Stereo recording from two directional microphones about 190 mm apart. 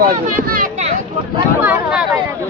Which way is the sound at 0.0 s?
50° right (ahead or behind).